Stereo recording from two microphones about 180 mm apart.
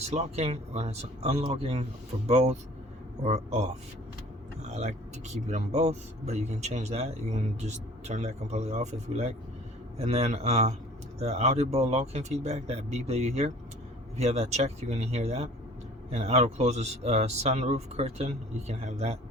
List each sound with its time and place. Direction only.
0.0 s speech: 35° right (ahead or behind)
4.7 s speech: 35° right (ahead or behind)